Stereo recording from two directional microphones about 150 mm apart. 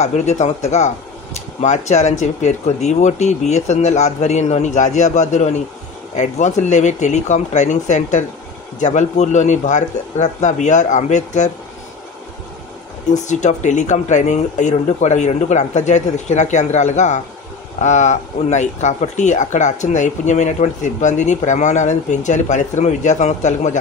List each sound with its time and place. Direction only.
0.0 s speech: 50° left (ahead or behind)
13.1 s speech: 50° left (ahead or behind)